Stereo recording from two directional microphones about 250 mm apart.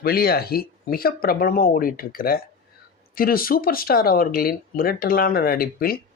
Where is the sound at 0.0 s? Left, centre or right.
Left.